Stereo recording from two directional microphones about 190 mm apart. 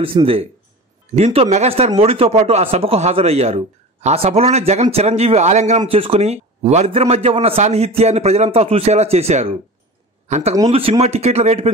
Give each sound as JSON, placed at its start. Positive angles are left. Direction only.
{"t": 0.0, "sound": "a man's voice", "side_deg": -30}